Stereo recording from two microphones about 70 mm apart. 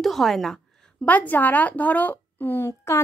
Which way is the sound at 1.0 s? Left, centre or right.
Left.